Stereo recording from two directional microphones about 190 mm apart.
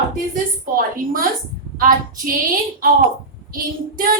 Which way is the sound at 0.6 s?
45° right (ahead or behind).